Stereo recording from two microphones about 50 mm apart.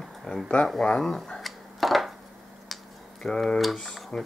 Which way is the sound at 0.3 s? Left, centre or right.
Centre.